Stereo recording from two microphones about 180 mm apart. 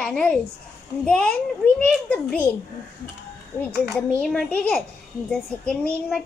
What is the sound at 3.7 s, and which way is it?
A child's voice, 5° left (ahead or behind).